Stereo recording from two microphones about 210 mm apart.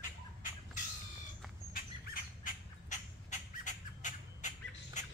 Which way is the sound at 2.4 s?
35° left (ahead or behind).